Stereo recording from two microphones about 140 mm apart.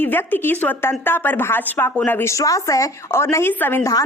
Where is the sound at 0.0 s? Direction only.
15° left (ahead or behind).